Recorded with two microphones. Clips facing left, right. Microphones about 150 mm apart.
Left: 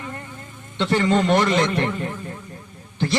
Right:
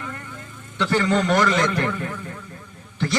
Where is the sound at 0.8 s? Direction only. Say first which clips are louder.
Left 1 dB; 25° left (ahead or behind).